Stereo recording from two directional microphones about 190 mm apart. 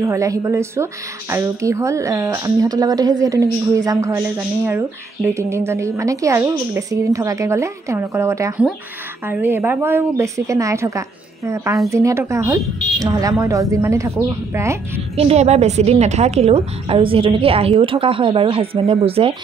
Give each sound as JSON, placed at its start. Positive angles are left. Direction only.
{"t": 0.0, "sound": "a woman's voice", "side_deg": -15}
{"t": 15.1, "sound": "a woman's voice", "side_deg": -35}